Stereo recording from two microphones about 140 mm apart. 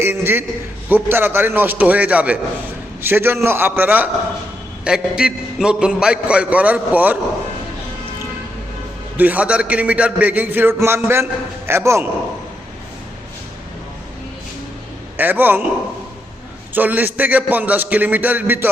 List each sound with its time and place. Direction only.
0.0 s a man's voice: 15° right (ahead or behind)
9.1 s a man's voice: 10° right (ahead or behind)
15.2 s a man's voice: 15° right (ahead or behind)
16.7 s a man's voice: 10° right (ahead or behind)